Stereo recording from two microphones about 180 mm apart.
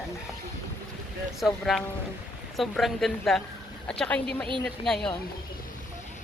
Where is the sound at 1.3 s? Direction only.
Centre (ahead or behind).